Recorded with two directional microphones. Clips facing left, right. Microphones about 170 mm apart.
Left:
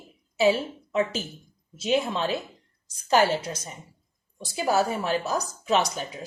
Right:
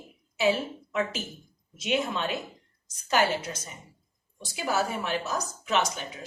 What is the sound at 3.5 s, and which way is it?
Speech, 25° left (ahead or behind).